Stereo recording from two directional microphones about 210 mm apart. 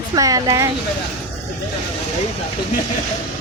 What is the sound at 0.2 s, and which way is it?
Speech, 15° right (ahead or behind).